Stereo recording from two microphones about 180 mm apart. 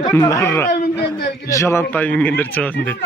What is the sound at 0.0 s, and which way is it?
Speech, 20° left (ahead or behind).